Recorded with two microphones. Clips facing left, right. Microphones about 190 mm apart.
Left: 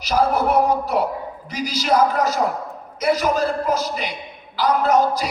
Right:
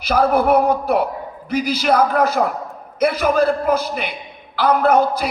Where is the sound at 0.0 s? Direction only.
60° right (ahead or behind).